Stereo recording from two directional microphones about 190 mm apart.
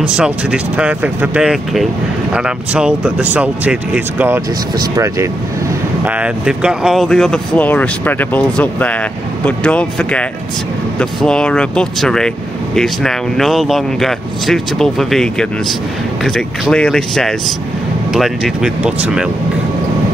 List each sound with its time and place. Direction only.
0.0 s speech: 5° right (ahead or behind)